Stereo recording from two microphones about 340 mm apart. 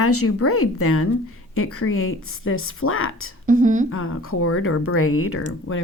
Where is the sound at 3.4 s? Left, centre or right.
Right.